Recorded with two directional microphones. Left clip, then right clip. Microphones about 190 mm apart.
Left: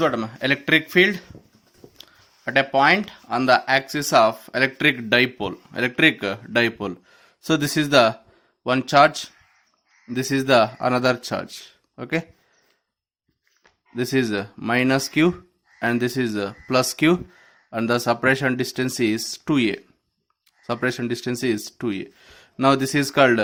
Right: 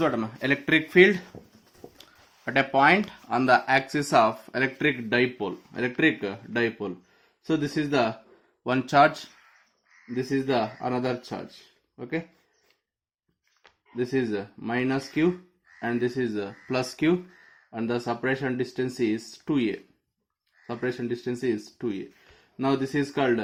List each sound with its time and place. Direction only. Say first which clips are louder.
0.0 s speech: left 4 dB; 15° left (ahead or behind)
2.0 s a sound: left 4 dB; 15° left (ahead or behind)
2.7 s speech: left 1 dB; 15° left (ahead or behind); by 8.1 s 35° left (ahead or behind)
8.6 s speech: left 4 dB; 25° left (ahead or behind)
10.1 s speech: left 8 dB; 40° left (ahead or behind)
13.9 s speech: left 5 dB; 40° left (ahead or behind)
20.8 s speech: left 4 dB; 40° left (ahead or behind)